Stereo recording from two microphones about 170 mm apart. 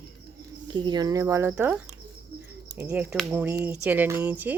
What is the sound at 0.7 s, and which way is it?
Speech, 25° right (ahead or behind).